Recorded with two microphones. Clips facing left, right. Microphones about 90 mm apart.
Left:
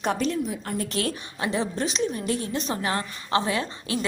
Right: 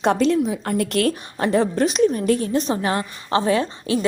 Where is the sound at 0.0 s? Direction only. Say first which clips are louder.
Right 8 dB; 90° right.